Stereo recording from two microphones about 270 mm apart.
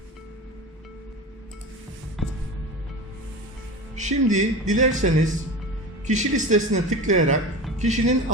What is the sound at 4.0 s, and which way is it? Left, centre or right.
A man's voice, right.